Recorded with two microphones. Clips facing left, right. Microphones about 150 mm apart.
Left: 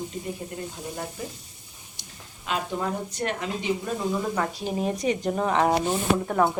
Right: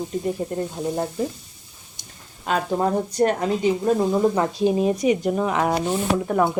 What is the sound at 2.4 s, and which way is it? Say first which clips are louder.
Speech: right 7 dB; 40° right (ahead or behind).